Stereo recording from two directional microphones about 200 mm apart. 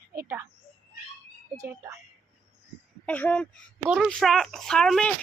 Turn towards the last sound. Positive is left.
turn(degrees=5)  # may be behind; listen again after turning